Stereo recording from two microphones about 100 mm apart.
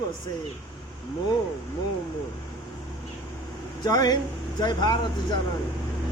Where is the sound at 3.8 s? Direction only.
40° left (ahead or behind).